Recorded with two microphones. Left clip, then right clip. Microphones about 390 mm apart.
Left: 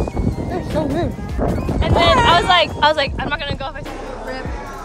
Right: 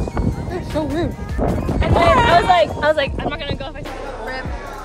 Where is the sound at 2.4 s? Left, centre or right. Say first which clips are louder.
Left 1 dB; centre.